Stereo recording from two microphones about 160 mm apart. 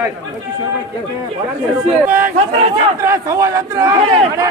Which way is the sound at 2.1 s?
15° right (ahead or behind).